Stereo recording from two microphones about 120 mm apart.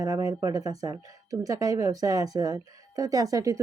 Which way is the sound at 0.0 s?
30° right (ahead or behind).